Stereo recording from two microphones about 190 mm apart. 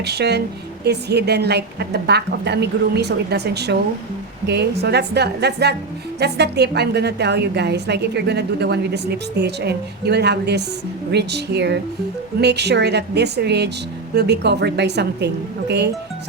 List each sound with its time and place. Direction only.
0.0 s a woman's voice: 60° right (ahead or behind)